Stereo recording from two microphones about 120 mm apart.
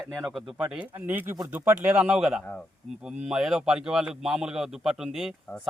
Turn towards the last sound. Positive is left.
turn(degrees=0)  # may be behind; listen again after turning